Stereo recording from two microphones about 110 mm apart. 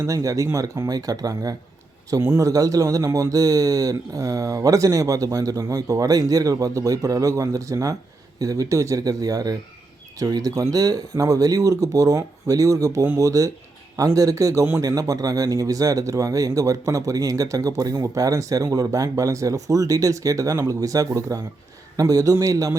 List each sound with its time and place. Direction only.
0.0 s a man's voice: 30° right (ahead or behind)